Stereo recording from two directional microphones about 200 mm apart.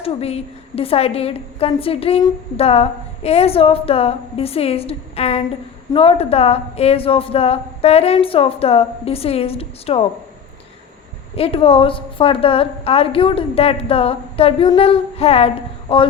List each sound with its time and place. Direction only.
0.0 s a woman's voice: 30° left (ahead or behind)
11.3 s a woman's voice: 30° left (ahead or behind)